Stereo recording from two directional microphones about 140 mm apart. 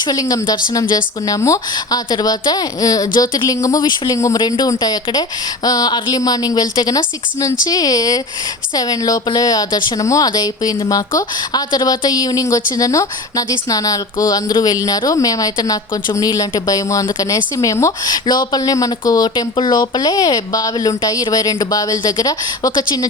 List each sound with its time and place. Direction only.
0.0 s speech: 30° left (ahead or behind)